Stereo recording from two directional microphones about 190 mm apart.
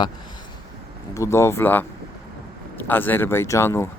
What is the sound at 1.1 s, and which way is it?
Speech, 15° left (ahead or behind).